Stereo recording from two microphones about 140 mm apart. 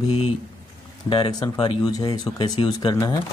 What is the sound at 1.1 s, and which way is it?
Speech, 30° left (ahead or behind).